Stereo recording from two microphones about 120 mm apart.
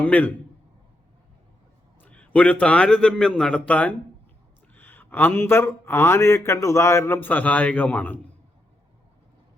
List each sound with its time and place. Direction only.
0.0 s a man's voice: 10° left (ahead or behind)
2.0 s a man's voice: 10° left (ahead or behind)